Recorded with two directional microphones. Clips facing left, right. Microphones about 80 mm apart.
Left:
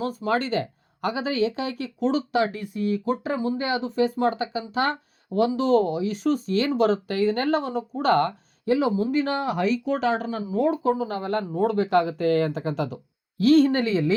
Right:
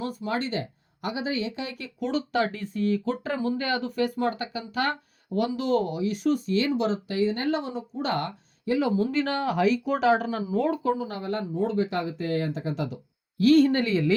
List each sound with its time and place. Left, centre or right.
0.0 s speech: left
9.0 s speech: centre
10.8 s speech: left
11.5 s speech: left
13.4 s speech: left